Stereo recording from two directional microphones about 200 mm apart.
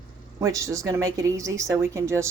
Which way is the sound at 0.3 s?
15° right (ahead or behind).